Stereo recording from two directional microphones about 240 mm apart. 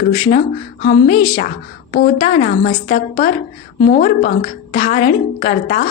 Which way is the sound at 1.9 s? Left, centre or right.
Left.